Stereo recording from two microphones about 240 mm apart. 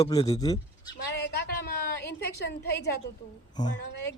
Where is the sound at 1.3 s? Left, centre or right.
Left.